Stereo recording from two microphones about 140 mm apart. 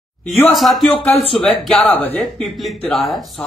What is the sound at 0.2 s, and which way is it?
Speech, 5° left (ahead or behind).